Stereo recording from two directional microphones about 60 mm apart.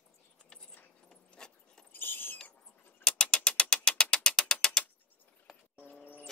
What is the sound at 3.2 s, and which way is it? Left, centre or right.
Tick-tock, centre.